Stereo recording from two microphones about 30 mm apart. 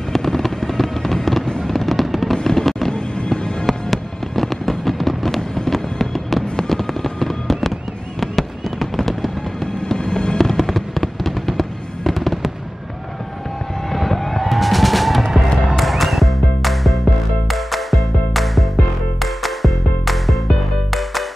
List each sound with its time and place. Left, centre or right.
0.1 s fireworks: centre
9.9 s fireworks: left
10.3 s fireworks: centre
13.9 s vehicle: centre
14.5 s music: centre